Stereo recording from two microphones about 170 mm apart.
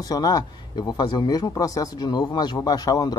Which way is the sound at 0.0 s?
20° left (ahead or behind).